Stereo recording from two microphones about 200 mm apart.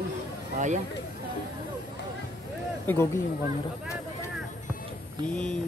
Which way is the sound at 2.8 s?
10° left (ahead or behind).